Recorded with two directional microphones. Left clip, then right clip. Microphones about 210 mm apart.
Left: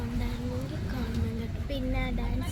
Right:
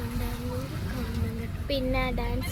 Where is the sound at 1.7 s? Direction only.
45° right (ahead or behind).